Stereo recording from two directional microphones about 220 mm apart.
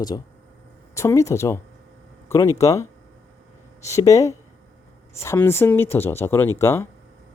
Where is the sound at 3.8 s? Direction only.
15° left (ahead or behind).